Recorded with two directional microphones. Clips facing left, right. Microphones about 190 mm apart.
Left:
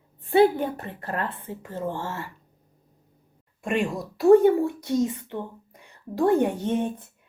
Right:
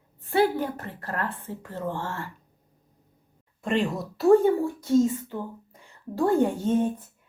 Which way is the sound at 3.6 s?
10° left (ahead or behind).